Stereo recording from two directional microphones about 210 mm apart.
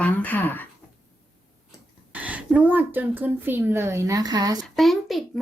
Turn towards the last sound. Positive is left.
turn(degrees=0)  # may be behind; listen again after turning